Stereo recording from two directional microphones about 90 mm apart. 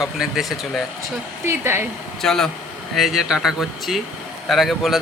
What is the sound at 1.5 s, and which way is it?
Speech, 25° right (ahead or behind).